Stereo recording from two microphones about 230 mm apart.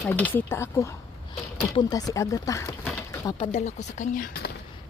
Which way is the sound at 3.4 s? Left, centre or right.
Left.